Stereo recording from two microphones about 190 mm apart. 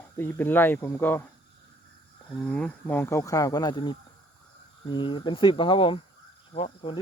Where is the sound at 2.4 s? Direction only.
5° left (ahead or behind).